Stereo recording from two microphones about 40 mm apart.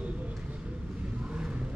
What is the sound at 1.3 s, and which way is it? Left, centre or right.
Vehicle, right.